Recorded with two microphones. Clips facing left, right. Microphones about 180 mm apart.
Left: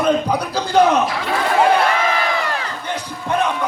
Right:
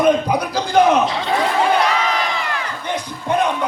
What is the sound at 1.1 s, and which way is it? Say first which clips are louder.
Speech: right 1 dB; 25° right (ahead or behind).